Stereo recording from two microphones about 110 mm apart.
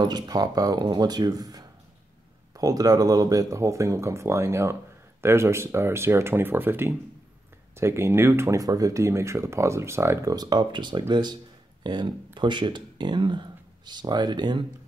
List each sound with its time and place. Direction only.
0.0 s speech: 40° right (ahead or behind)
10.3 s speech: 40° right (ahead or behind)